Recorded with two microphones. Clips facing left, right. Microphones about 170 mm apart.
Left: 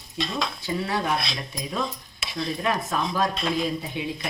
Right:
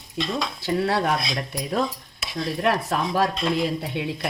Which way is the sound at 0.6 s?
70° right (ahead or behind).